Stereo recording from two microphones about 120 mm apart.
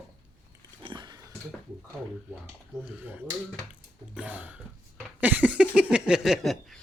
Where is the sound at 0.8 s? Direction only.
40° right (ahead or behind).